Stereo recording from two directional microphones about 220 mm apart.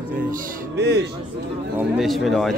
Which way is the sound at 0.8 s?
50° right (ahead or behind).